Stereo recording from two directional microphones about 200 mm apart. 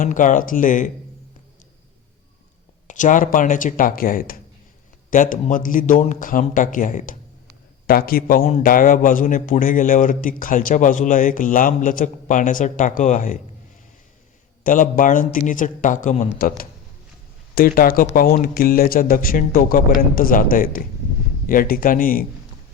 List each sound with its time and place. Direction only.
0.0 s speech: 40° left (ahead or behind)
2.8 s speech: 40° left (ahead or behind)
14.6 s speech: 40° left (ahead or behind)